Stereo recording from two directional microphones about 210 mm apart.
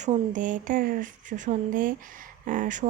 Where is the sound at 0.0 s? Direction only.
35° right (ahead or behind).